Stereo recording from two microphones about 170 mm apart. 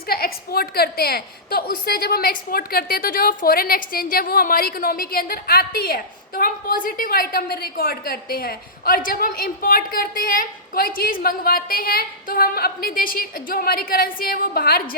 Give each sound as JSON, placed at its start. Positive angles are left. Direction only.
{"t": 0.1, "sound": "a woman's voice", "side_deg": 65}